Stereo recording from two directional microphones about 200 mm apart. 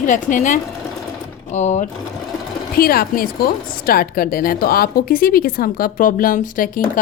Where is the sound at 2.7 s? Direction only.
50° left (ahead or behind).